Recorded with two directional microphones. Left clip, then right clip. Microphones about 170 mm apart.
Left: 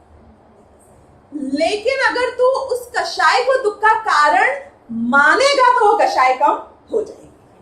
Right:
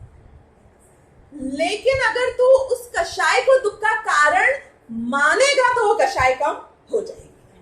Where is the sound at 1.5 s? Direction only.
60° right (ahead or behind).